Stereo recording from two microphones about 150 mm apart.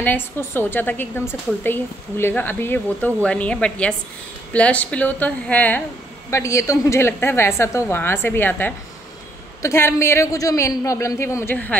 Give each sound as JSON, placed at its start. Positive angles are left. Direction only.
{"t": 0.0, "sound": "a woman's voice", "side_deg": 15}